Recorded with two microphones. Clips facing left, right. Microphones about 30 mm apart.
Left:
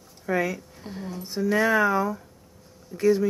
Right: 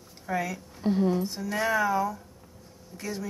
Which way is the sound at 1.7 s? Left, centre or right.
Left.